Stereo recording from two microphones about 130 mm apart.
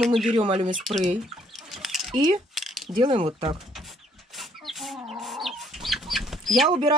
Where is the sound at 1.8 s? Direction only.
Centre (ahead or behind).